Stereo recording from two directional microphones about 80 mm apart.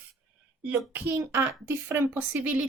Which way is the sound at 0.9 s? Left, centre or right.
Right.